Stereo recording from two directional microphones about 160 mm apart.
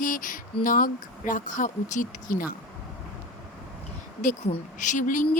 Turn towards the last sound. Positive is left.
turn(degrees=55)  # may be behind; listen again after turning